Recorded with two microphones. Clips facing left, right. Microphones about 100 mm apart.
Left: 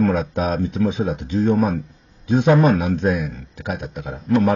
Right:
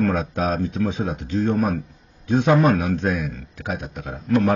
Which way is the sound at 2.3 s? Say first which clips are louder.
Left 2 dB; 15° left (ahead or behind).